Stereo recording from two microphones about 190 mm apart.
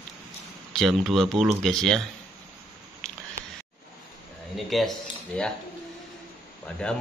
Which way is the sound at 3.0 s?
5° left (ahead or behind).